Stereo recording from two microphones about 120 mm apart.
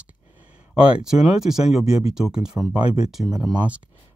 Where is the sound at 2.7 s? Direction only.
60° left (ahead or behind).